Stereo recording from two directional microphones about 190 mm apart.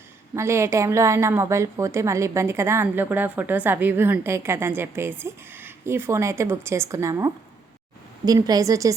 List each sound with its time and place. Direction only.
0.3 s a woman's voice: 15° right (ahead or behind)